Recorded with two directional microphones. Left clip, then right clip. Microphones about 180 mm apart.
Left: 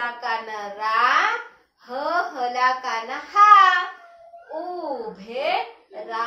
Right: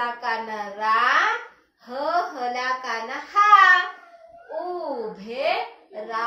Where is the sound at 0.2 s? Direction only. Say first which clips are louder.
Even; 15° left (ahead or behind).